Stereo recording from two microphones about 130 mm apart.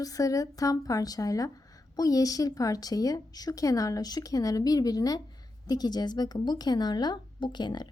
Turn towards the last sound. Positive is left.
turn(degrees=35)  # may be behind; listen again after turning